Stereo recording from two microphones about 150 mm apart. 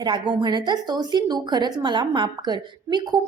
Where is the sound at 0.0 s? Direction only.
30° right (ahead or behind).